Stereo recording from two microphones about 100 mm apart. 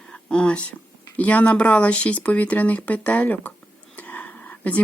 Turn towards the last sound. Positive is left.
turn(degrees=15)  # may be behind; listen again after turning